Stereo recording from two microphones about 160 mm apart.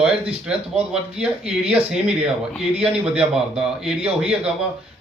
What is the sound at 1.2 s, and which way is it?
A man's voice, 5° right (ahead or behind).